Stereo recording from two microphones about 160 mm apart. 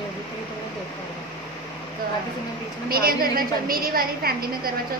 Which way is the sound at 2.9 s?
65° right (ahead or behind).